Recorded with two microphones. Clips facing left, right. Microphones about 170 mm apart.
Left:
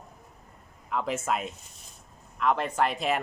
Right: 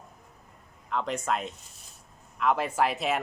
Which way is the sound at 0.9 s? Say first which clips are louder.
Even; 5° left (ahead or behind).